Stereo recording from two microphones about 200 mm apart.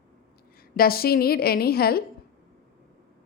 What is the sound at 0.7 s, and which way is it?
A woman's voice, 50° left (ahead or behind).